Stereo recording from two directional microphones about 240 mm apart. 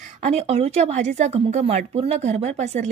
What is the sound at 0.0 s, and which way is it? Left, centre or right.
Speech, right.